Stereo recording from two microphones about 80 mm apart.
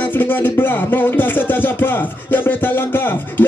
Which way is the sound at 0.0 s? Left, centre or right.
Left.